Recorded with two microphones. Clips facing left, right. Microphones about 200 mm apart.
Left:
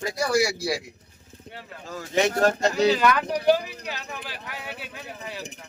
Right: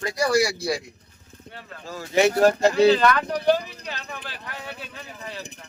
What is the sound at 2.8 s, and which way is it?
Speech, 10° left (ahead or behind).